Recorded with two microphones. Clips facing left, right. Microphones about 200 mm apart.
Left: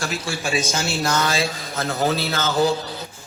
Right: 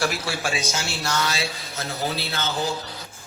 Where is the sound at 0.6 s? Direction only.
50° left (ahead or behind).